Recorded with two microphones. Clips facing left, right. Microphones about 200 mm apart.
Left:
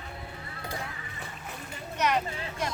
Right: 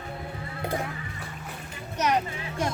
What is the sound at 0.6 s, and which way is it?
Music, 55° right (ahead or behind).